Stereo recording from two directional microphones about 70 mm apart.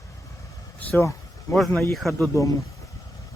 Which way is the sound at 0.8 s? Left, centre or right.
Left.